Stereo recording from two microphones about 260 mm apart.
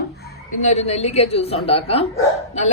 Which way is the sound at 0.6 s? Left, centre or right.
Left.